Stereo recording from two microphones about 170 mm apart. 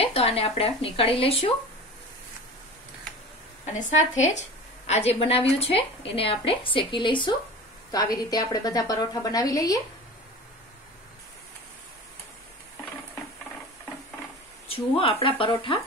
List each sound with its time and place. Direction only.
0.0 s speech: 35° left (ahead or behind)
3.9 s a woman's voice: 45° left (ahead or behind); by 9.8 s 20° left (ahead or behind)
14.7 s speech: 35° left (ahead or behind)